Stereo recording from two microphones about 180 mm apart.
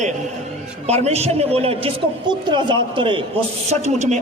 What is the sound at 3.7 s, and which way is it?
Speech, 40° right (ahead or behind).